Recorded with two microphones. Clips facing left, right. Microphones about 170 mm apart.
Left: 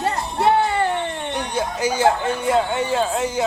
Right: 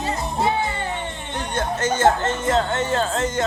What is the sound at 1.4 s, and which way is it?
Speech, 10° left (ahead or behind).